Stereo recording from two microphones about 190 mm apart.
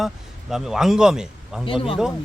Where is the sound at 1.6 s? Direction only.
25° left (ahead or behind).